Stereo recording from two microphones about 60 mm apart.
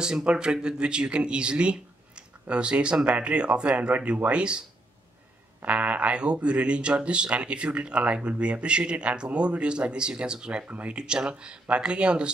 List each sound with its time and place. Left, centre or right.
0.0 s speech: centre